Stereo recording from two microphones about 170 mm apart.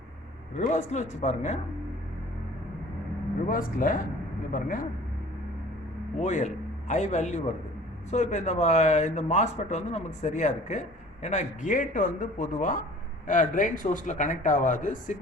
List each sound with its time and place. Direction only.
0.5 s speech: 45° left (ahead or behind)
3.5 s a man's voice: 55° left (ahead or behind)
6.2 s speech: 45° left (ahead or behind)